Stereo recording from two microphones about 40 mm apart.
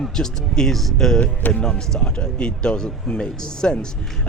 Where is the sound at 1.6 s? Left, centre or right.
Left.